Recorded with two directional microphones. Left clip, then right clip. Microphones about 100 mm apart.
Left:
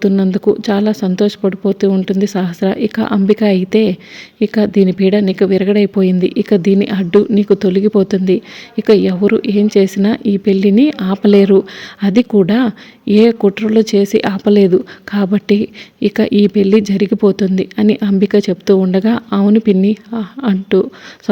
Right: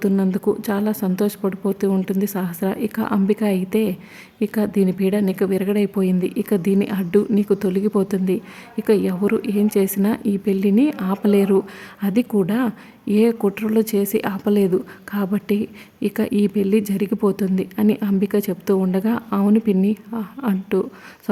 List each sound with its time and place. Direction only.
0.2 s a woman's voice: 20° left (ahead or behind)
17.7 s speech: 30° left (ahead or behind)